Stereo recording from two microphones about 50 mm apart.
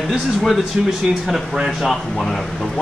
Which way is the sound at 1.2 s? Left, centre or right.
Centre.